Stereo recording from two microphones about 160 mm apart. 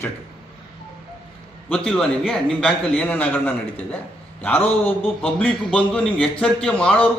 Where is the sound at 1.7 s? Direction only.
5° left (ahead or behind).